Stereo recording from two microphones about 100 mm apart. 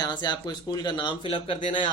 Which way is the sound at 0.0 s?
50° left (ahead or behind).